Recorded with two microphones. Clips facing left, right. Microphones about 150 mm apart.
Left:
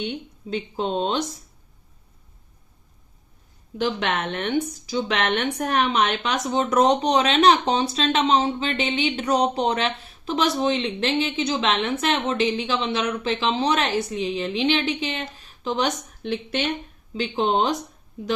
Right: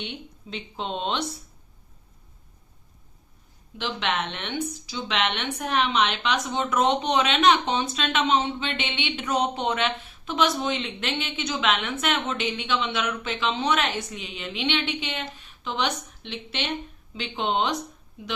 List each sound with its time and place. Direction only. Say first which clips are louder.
0.0 s speech: left 7 dB; 40° left (ahead or behind)
3.8 s speech: left 4 dB; 45° left (ahead or behind)